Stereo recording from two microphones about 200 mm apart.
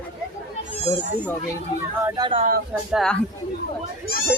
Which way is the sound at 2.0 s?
20° right (ahead or behind).